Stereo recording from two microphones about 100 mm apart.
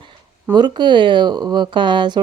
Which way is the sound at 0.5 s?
50° right (ahead or behind).